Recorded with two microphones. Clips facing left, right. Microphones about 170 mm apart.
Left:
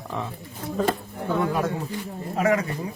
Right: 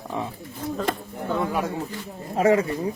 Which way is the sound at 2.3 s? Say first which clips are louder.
Right 3 dB; 30° right (ahead or behind).